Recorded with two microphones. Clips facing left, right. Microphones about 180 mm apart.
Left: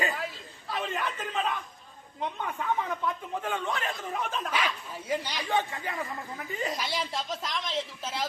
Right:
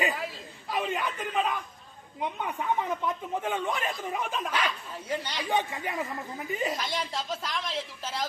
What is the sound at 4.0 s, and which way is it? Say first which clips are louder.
Speech: right 1 dB; centre (ahead or behind).